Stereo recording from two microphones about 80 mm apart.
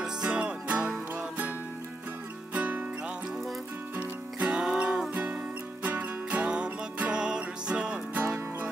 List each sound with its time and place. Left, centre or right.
0.0 s music: centre
2.5 s music: centre
3.9 s music: centre